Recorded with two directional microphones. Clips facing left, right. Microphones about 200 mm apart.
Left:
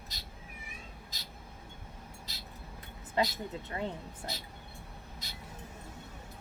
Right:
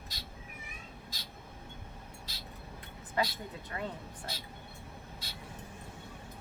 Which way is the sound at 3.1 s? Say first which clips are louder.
Left 2 dB; 25° left (ahead or behind).